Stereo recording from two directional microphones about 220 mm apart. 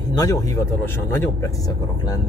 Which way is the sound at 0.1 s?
15° left (ahead or behind).